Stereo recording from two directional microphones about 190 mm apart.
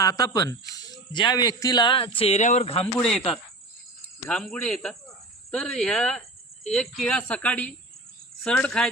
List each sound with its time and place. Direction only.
0.0 s speech: 20° left (ahead or behind); by 2.8 s 35° left (ahead or behind)
2.8 s speech: 5° left (ahead or behind)